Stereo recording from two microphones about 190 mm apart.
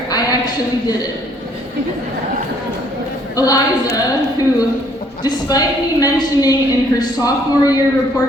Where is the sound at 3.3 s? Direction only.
20° left (ahead or behind).